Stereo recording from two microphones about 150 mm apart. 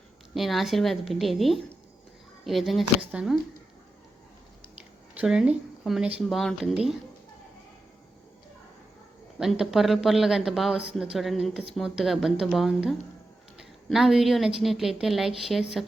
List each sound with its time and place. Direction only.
0.3 s speech: centre (ahead or behind)
5.1 s speech: 5° right (ahead or behind)
9.4 s speech: centre (ahead or behind)